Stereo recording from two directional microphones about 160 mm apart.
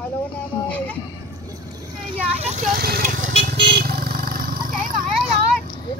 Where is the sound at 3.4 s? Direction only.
85° right; by 5.0 s 65° right (ahead or behind).